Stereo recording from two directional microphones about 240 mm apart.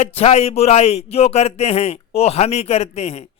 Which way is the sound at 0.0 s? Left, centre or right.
Left.